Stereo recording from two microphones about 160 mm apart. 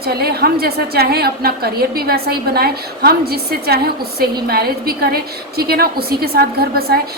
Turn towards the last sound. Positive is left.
turn(degrees=-75)  # may be behind; listen again after turning